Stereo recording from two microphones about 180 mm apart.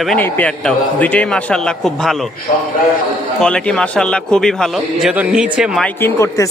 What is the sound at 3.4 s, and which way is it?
Speech, 5° left (ahead or behind).